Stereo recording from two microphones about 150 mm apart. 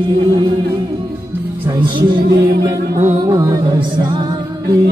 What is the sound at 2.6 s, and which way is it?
Music, 20° right (ahead or behind).